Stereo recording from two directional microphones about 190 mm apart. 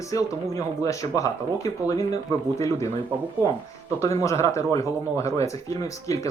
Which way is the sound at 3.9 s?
15° left (ahead or behind).